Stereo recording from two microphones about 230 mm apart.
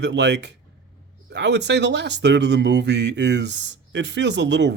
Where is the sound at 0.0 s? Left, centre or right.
Right.